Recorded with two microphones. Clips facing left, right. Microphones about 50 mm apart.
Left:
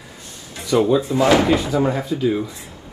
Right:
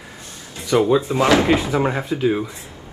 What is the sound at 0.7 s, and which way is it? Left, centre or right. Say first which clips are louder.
Speech: even; right.